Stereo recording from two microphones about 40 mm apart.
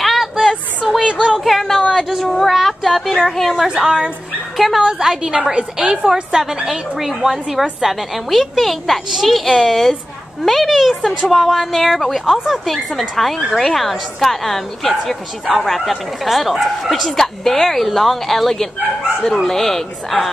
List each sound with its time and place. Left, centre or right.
0.0 s a sound: centre
1.4 s a woman's voice: centre
2.5 s a woman's voice: centre
3.6 s a woman's voice: centre
4.6 s a woman's voice: centre
4.8 s a woman's voice: centre